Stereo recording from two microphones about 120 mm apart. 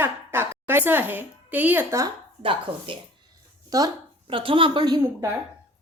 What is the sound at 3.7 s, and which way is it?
Speech, 30° right (ahead or behind).